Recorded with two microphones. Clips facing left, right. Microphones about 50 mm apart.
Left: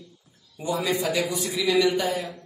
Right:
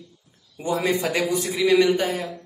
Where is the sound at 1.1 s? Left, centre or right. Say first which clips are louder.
Right 3 dB; right.